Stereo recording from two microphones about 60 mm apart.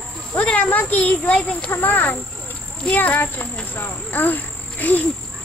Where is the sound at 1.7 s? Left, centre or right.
Left.